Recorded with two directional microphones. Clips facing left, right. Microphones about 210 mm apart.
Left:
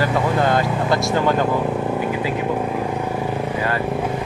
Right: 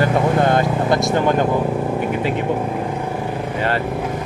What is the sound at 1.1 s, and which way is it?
Speech, 20° right (ahead or behind).